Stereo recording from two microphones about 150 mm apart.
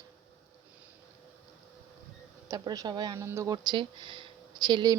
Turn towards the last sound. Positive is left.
turn(degrees=-30)  # may be behind; listen again after turning